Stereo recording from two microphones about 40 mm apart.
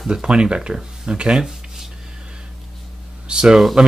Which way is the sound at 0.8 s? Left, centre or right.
Right.